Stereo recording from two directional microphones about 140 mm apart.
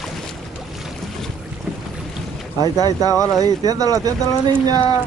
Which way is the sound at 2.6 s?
25° right (ahead or behind).